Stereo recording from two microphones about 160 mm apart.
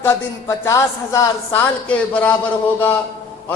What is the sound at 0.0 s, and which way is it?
A woman's voice, 15° left (ahead or behind).